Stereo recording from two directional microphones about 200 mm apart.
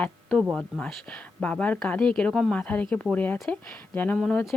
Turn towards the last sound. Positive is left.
turn(degrees=5)  # may be behind; listen again after turning